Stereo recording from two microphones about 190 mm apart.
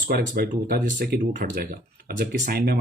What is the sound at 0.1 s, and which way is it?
Speech, 55° right (ahead or behind).